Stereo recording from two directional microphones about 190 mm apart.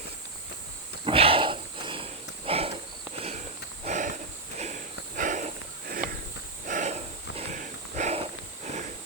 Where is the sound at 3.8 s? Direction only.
40° right (ahead or behind).